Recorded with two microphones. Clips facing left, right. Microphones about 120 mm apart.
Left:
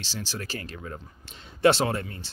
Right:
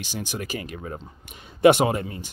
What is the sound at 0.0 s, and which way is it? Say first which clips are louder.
Speech: right 4 dB; 15° right (ahead or behind).